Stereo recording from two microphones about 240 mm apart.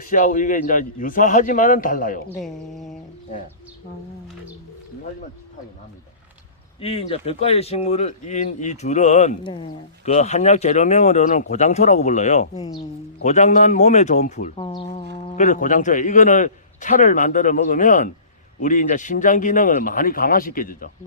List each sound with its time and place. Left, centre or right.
0.0 s a man's voice: left
2.3 s speech: centre
6.7 s speech: left
12.5 s speech: centre
13.2 s a man's voice: left